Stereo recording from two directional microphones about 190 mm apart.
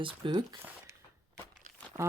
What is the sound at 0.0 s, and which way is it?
Speech, 25° right (ahead or behind).